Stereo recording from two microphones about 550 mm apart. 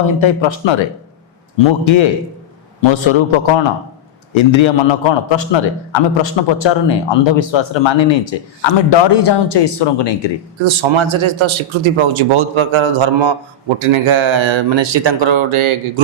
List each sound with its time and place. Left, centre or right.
0.2 s a man's voice: left
10.6 s speech: right